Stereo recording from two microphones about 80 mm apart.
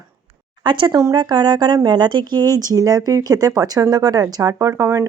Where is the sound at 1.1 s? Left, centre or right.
Right.